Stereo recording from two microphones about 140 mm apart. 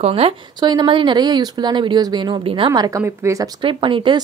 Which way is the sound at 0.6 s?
30° right (ahead or behind).